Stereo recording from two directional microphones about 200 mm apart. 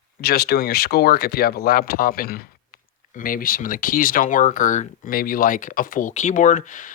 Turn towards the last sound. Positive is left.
turn(degrees=40)  # may be behind; listen again after turning